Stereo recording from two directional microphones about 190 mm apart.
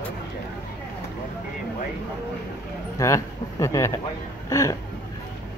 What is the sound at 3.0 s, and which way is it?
Speech, 15° left (ahead or behind).